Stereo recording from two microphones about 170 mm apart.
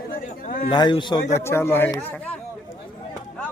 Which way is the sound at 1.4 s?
15° left (ahead or behind).